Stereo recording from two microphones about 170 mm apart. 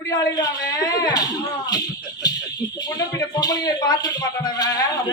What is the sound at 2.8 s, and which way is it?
Speech, 20° left (ahead or behind).